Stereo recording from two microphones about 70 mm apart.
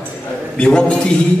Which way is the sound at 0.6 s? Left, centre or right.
Centre.